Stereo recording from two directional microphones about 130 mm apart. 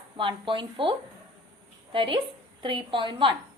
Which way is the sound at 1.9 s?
40° right (ahead or behind).